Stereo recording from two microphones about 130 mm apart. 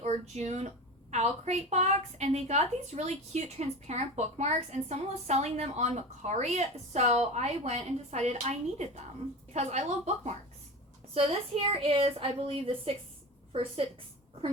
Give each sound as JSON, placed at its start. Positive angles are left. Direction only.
{"t": 0.0, "sound": "a woman's voice", "side_deg": -60}
{"t": 11.1, "sound": "a woman's voice", "side_deg": -50}